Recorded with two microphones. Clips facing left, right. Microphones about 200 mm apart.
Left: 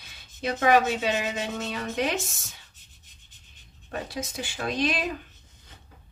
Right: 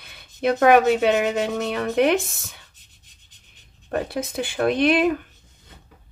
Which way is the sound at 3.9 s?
55° right (ahead or behind).